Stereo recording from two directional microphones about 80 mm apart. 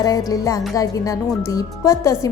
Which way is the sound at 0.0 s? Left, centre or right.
Left.